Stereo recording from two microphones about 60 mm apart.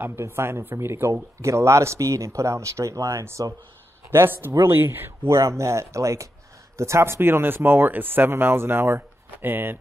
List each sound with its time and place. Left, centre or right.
0.2 s speech: right
1.4 s speech: right
4.1 s speech: right